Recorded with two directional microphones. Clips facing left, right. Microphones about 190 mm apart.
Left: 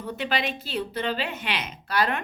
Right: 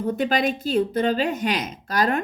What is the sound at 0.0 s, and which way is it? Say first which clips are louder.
Speech: right 7 dB; 45° right (ahead or behind).